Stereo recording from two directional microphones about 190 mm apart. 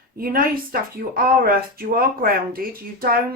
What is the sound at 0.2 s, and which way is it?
A woman's voice, 50° right (ahead or behind).